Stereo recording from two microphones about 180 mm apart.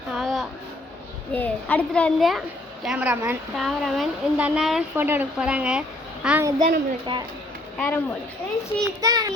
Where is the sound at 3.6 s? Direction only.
Centre (ahead or behind).